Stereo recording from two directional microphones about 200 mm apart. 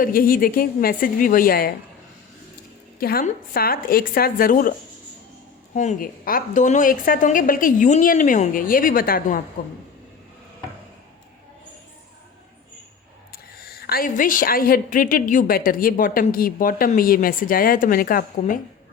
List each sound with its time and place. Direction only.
0.0 s a woman's voice: 45° left (ahead or behind)
3.0 s a woman's voice: 50° left (ahead or behind)
5.7 s a woman's voice: 35° left (ahead or behind)
13.8 s a woman's voice: 45° left (ahead or behind)